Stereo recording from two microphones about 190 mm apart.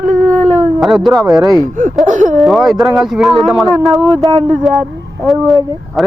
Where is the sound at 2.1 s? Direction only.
40° right (ahead or behind).